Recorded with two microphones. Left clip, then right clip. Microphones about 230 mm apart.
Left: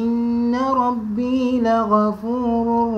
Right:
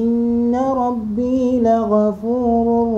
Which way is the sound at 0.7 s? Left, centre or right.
Left.